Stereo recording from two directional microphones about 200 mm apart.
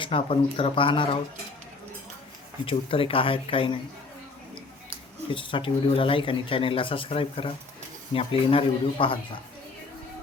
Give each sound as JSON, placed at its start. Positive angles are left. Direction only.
{"t": 0.0, "sound": "speech", "side_deg": 25}
{"t": 2.6, "sound": "speech", "side_deg": 25}
{"t": 5.3, "sound": "speech", "side_deg": 25}